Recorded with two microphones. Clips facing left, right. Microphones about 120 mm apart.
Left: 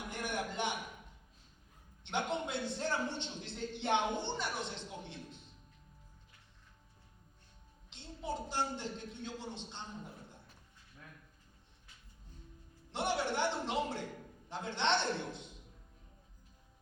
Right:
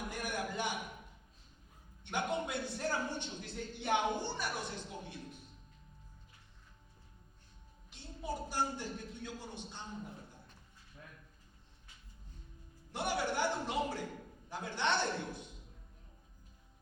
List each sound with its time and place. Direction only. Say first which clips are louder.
0.1 s a sound: left 3 dB; 20° left (ahead or behind)
2.0 s a man's voice: even; 20° left (ahead or behind)
7.9 s a man's voice: left 1 dB; 20° left (ahead or behind)
12.9 s a man's voice: left 1 dB; 20° left (ahead or behind)